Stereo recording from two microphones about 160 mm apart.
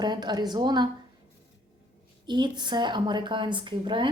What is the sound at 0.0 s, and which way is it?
Speech, 25° right (ahead or behind).